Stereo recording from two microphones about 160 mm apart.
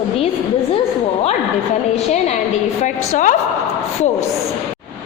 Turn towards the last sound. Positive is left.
turn(degrees=50)  # may be behind; listen again after turning